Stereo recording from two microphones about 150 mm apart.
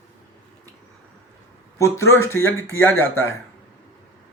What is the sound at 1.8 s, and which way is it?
Speech, 20° left (ahead or behind).